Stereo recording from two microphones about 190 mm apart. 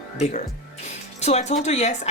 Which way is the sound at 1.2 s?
35° left (ahead or behind).